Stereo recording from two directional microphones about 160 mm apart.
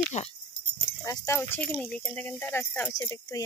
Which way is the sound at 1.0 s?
20° left (ahead or behind).